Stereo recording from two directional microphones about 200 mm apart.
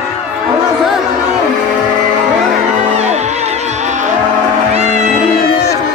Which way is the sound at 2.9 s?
35° right (ahead or behind).